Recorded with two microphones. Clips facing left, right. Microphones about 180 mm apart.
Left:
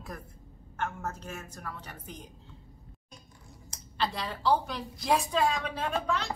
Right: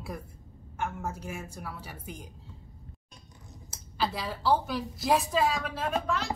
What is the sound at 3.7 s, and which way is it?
A woman's voice, 5° right (ahead or behind).